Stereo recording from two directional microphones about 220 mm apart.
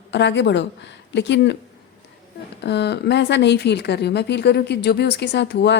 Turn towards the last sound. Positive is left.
turn(degrees=50)  # may be behind; listen again after turning